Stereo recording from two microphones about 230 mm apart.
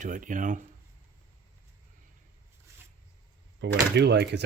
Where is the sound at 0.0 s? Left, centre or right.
Right.